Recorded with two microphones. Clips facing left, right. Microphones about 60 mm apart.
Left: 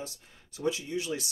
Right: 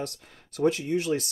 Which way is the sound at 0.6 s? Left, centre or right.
Right.